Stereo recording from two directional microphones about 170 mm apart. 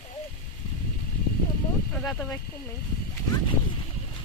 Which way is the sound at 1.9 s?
Centre (ahead or behind).